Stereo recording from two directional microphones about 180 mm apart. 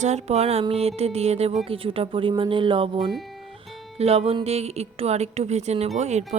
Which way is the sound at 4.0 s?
35° right (ahead or behind).